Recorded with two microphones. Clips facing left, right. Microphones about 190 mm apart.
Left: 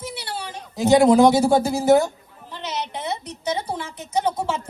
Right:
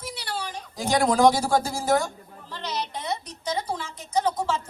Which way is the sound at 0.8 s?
25° left (ahead or behind).